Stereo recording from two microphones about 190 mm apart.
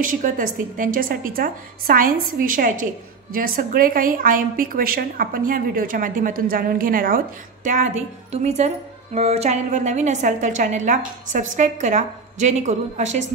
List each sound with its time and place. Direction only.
0.0 s a woman's voice: 45° right (ahead or behind)